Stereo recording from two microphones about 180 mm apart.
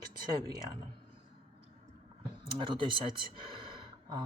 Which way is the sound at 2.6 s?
25° right (ahead or behind).